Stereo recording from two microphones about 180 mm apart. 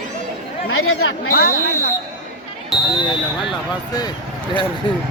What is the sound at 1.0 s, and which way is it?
Speech, 60° left (ahead or behind).